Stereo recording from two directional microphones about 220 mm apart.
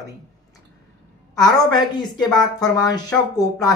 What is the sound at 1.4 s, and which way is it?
Speech, 20° left (ahead or behind).